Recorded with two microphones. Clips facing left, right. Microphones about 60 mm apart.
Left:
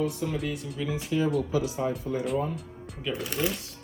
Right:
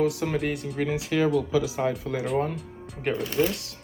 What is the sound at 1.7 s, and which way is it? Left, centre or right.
Speech, right.